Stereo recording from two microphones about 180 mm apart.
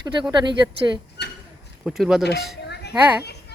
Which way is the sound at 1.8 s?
Centre (ahead or behind).